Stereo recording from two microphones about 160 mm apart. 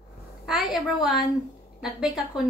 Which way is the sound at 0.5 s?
Centre (ahead or behind).